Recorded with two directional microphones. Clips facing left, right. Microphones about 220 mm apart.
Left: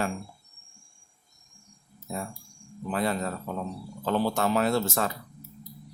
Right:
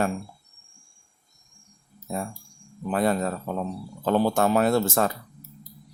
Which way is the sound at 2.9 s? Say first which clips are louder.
Right 5 dB; 45° right (ahead or behind).